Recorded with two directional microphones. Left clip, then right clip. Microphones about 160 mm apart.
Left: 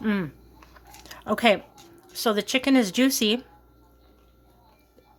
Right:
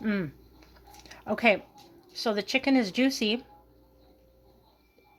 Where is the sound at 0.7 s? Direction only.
10° left (ahead or behind).